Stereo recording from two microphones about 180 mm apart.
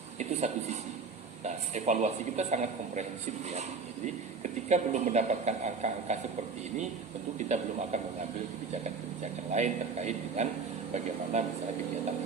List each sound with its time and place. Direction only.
0.2 s speech: 40° right (ahead or behind)
7.3 s speech: 40° right (ahead or behind)
9.5 s speech: 40° right (ahead or behind)